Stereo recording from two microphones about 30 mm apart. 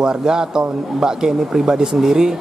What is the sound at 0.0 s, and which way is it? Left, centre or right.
Speech, right.